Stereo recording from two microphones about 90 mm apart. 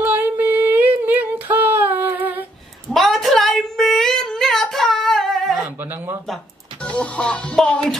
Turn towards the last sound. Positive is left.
turn(degrees=15)  # may be behind; listen again after turning